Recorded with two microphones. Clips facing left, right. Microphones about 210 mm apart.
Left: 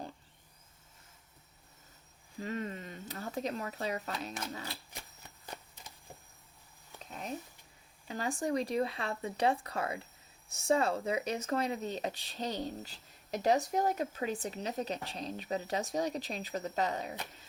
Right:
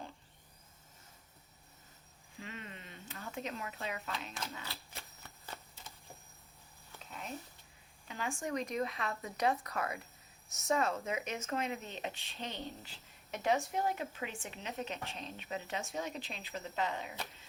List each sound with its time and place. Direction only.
2.4 s speech: 40° left (ahead or behind)
8.0 s speech: 35° left (ahead or behind)